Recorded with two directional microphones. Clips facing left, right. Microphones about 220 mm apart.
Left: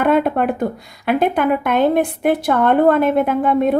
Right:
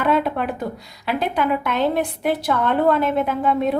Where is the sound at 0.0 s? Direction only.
50° left (ahead or behind).